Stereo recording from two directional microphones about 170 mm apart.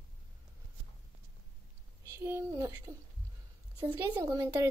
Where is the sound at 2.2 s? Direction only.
15° right (ahead or behind).